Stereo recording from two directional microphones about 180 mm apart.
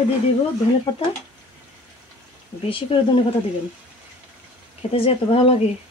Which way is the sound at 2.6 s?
30° left (ahead or behind).